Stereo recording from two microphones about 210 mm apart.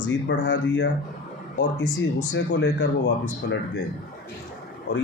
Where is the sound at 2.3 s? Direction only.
55° left (ahead or behind).